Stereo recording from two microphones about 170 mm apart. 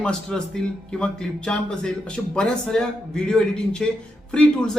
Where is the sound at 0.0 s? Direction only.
5° left (ahead or behind).